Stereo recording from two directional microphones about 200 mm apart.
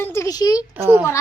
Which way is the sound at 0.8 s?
10° right (ahead or behind).